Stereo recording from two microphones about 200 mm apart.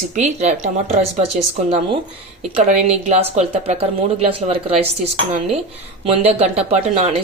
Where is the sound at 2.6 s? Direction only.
35° right (ahead or behind).